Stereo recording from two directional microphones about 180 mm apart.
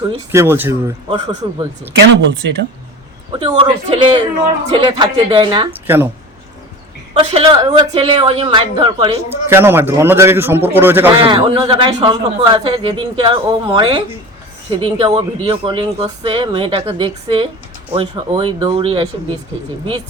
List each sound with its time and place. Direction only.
0.3 s a man's voice: 10° right (ahead or behind)
1.4 s a man's voice: 25° right (ahead or behind)
1.9 s speech: 70° right (ahead or behind)
3.5 s a man's voice: 35° right (ahead or behind)
5.9 s a man's voice: 15° right (ahead or behind)
7.1 s a man's voice: 35° right (ahead or behind)
9.3 s a man's voice: 15° right (ahead or behind)
11.1 s a man's voice: 25° right (ahead or behind)